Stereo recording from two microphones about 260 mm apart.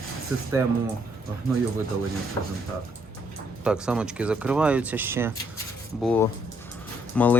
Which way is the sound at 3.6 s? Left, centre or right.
Centre.